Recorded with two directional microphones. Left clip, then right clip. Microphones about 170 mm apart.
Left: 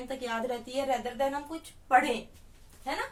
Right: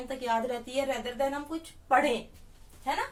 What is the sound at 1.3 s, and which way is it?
Speech, 20° left (ahead or behind).